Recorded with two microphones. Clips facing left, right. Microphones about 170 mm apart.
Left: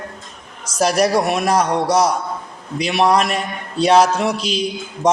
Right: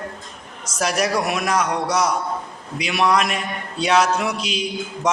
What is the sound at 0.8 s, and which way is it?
A man's voice, 35° left (ahead or behind).